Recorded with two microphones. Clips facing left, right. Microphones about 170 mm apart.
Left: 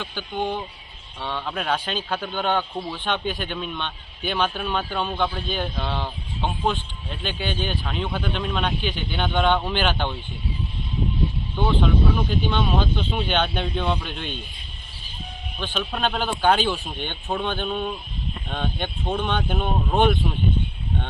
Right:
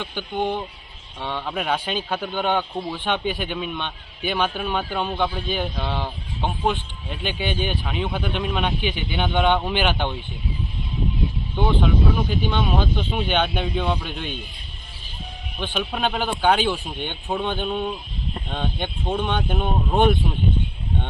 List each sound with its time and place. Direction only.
0.0 s a man's voice: 15° right (ahead or behind)
11.5 s a man's voice: 15° right (ahead or behind)
15.5 s a man's voice: 10° right (ahead or behind)